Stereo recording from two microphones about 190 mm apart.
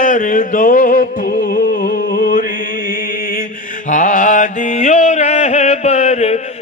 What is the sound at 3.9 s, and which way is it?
Mantra, 40° left (ahead or behind).